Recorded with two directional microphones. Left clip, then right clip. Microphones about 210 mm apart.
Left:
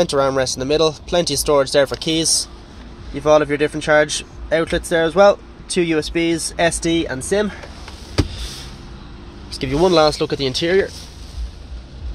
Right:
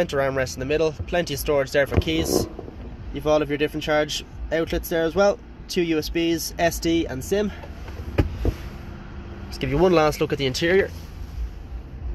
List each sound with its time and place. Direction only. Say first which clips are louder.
0.0 s speech: left 6 dB; 20° left (ahead or behind)
9.5 s speech: left 3 dB; 15° left (ahead or behind)